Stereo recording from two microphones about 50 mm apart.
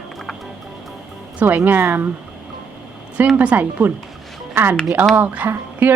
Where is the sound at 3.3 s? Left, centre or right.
Right.